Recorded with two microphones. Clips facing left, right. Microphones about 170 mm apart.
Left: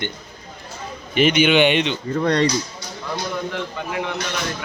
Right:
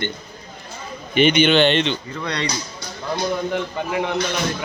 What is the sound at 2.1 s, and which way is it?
Speech, 45° left (ahead or behind).